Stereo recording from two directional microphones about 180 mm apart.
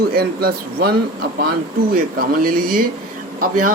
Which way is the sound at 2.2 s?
50° right (ahead or behind).